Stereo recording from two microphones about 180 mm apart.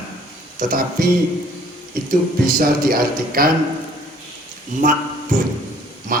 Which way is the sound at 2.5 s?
55° right (ahead or behind).